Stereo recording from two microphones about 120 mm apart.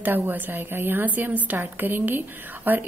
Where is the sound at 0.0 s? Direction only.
15° right (ahead or behind).